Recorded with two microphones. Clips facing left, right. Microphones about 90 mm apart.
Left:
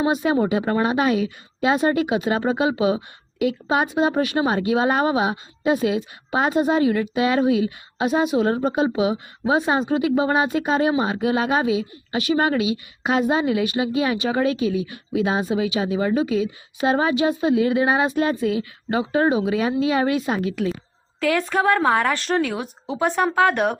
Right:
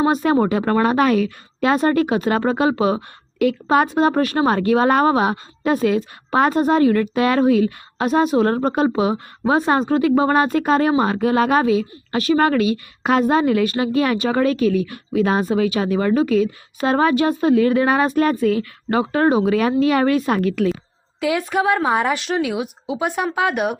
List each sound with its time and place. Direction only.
0.0 s speech: 45° right (ahead or behind)
21.2 s speech: 10° right (ahead or behind)
22.2 s speech: 5° right (ahead or behind)